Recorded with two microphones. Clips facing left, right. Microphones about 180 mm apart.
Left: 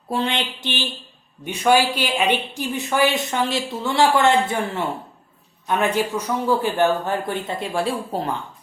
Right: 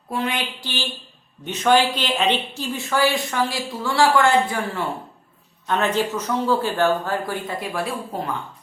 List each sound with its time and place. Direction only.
0.1 s speech: 25° left (ahead or behind)
5.6 s a man's voice: 10° left (ahead or behind); by 8.2 s 30° left (ahead or behind)